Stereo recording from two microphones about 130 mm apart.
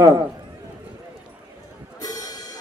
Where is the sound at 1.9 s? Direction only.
30° left (ahead or behind).